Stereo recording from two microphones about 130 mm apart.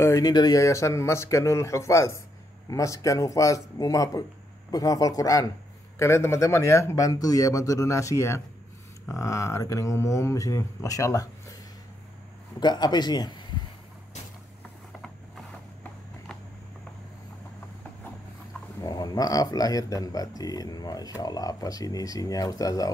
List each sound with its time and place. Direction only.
0.0 s speech: 25° left (ahead or behind)
12.5 s speech: 35° left (ahead or behind)
18.8 s speech: 30° left (ahead or behind)